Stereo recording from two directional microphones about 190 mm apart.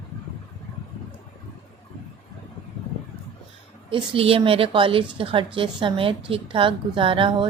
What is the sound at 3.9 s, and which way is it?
A woman's voice, 30° right (ahead or behind).